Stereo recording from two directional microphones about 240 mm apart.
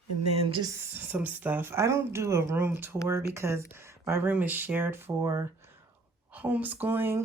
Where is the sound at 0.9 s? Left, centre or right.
Centre.